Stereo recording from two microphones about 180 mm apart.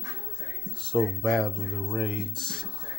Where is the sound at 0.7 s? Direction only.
5° left (ahead or behind).